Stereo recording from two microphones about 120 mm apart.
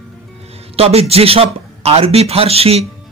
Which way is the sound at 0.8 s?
60° right (ahead or behind).